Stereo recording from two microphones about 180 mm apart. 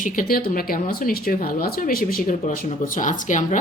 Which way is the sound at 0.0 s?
50° left (ahead or behind).